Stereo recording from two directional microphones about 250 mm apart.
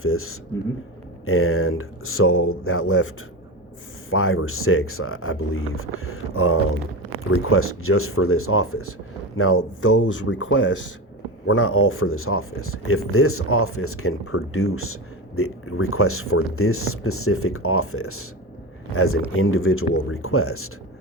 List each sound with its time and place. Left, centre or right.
0.0 s speech: left
4.1 s speech: left